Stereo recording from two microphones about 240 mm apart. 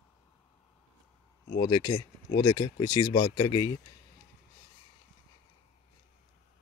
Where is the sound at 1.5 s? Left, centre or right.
Centre.